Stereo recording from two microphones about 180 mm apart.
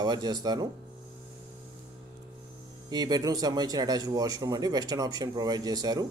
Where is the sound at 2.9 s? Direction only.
20° right (ahead or behind).